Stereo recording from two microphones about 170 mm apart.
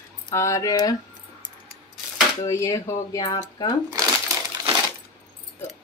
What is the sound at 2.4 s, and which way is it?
Speech, 20° left (ahead or behind).